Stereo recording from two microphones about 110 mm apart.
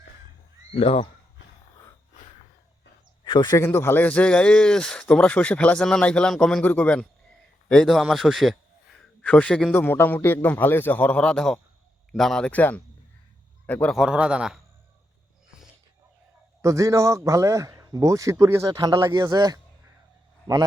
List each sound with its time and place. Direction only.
0.8 s speech: 65° left (ahead or behind)
3.2 s speech: 40° left (ahead or behind)
3.6 s speech: 25° left (ahead or behind); by 8.5 s centre (ahead or behind)
9.2 s speech: 10° left (ahead or behind)
12.5 s a man's voice: 15° left (ahead or behind)
13.9 s a man's voice: 5° right (ahead or behind)
16.6 s a man's voice: 30° right (ahead or behind)
18.7 s speech: 35° right (ahead or behind)